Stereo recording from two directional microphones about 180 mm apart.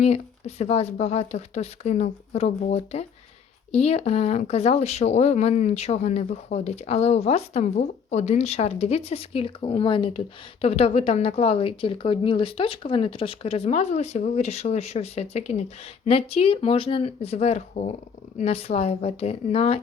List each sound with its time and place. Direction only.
0.0 s speech: 35° left (ahead or behind)